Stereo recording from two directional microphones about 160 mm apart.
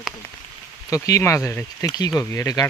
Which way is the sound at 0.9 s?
20° left (ahead or behind).